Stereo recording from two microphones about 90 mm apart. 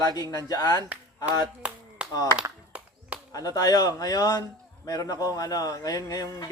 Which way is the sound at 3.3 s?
40° left (ahead or behind).